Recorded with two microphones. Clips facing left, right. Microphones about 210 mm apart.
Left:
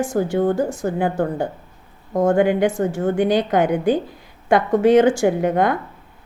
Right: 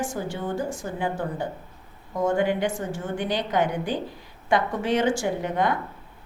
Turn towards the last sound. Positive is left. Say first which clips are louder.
# left 7 dB
turn(degrees=50)  # may be behind; listen again after turning